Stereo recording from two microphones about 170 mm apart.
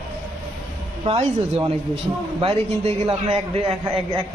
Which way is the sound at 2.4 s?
35° right (ahead or behind).